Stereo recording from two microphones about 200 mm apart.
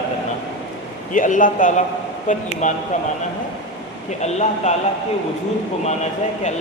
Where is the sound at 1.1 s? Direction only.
40° left (ahead or behind).